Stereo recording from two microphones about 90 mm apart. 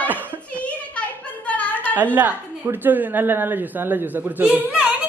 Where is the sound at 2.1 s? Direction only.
20° right (ahead or behind).